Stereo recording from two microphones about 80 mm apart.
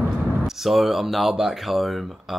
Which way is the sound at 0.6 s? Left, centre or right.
Centre.